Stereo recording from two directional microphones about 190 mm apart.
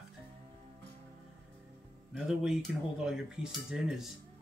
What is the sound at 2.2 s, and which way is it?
Speech, 5° right (ahead or behind).